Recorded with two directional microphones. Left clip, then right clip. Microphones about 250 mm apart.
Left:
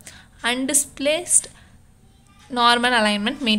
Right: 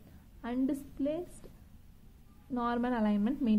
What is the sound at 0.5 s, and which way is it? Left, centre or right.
Speech, centre.